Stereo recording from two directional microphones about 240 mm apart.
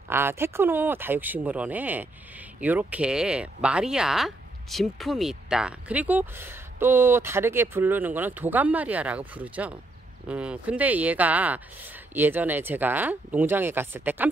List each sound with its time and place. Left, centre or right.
0.1 s speech: centre